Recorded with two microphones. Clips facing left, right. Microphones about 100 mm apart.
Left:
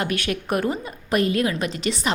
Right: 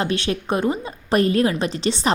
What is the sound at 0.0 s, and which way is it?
Speech, 30° right (ahead or behind).